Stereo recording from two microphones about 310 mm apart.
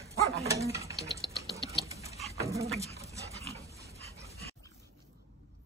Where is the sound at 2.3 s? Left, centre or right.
Centre.